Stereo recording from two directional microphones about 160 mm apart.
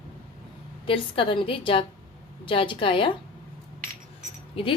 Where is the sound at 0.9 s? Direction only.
35° left (ahead or behind).